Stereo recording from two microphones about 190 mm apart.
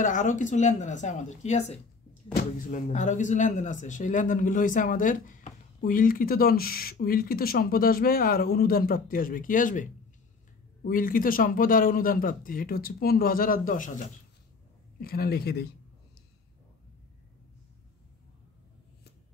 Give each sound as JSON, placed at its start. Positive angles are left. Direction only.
{"t": 0.0, "sound": "speech", "side_deg": 40}